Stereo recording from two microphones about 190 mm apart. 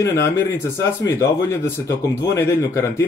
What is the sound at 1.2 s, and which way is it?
A man's voice, 15° left (ahead or behind).